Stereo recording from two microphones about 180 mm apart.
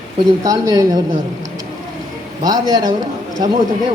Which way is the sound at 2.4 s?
20° right (ahead or behind).